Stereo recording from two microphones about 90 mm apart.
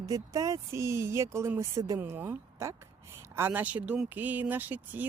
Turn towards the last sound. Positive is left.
turn(degrees=-20)  # may be behind; listen again after turning